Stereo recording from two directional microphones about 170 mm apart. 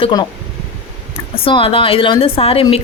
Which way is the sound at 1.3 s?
35° left (ahead or behind).